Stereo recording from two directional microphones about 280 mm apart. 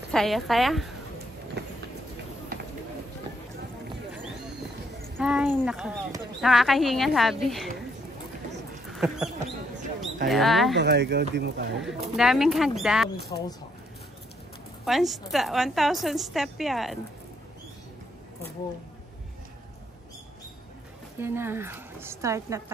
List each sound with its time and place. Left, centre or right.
0.1 s speech: centre
1.6 s a sound: right
5.2 s speech: centre
8.9 s dog: centre
10.2 s speech: centre
10.8 s speech: right
11.8 s speech: centre
13.3 s speech: centre
14.9 s speech: centre
21.2 s a woman's voice: centre